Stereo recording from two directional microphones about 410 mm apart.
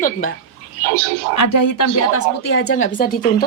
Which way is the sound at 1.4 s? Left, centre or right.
Left.